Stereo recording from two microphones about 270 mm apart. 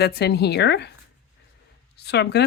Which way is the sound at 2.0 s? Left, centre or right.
Left.